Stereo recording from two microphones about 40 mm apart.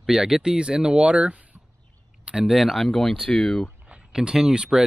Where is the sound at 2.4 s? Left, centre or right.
Centre.